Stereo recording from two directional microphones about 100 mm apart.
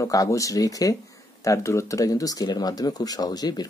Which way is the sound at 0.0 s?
35° left (ahead or behind).